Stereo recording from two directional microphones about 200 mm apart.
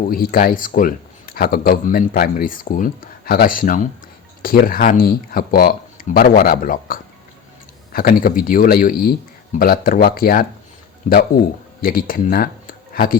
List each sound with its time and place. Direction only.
0.1 s a man's voice: 45° left (ahead or behind)